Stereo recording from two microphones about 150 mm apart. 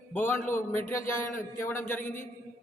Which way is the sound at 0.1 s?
15° left (ahead or behind).